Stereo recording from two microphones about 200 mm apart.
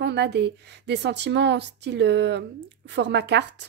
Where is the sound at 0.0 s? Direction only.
60° right (ahead or behind).